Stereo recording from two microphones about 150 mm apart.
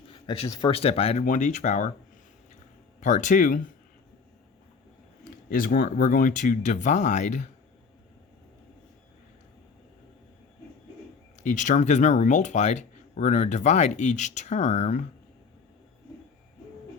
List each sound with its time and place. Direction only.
0.1 s speech: 25° left (ahead or behind)
0.7 s speech: 40° left (ahead or behind)
1.2 s speech: 60° left (ahead or behind)
3.0 s speech: 55° left (ahead or behind)
5.5 s speech: 70° left (ahead or behind); by 7.4 s 50° left (ahead or behind)
11.4 s speech: 55° left (ahead or behind)